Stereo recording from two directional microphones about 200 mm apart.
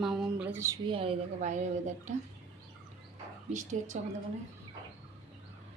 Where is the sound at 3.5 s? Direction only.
35° right (ahead or behind).